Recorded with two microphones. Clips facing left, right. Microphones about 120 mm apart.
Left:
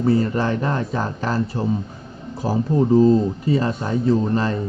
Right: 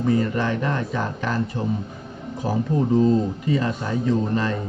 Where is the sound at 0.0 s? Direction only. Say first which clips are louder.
Left 2 dB; 35° left (ahead or behind).